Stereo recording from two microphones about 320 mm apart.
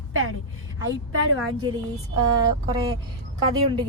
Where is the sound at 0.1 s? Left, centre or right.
Right.